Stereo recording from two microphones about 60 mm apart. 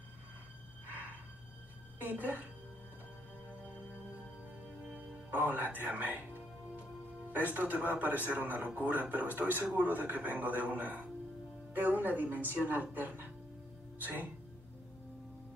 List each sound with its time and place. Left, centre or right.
2.0 s a woman's voice: right
4.9 s a woman's voice: right